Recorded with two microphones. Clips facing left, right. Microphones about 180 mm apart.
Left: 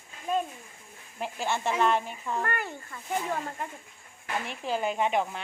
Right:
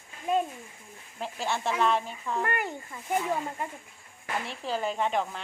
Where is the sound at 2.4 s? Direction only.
15° right (ahead or behind).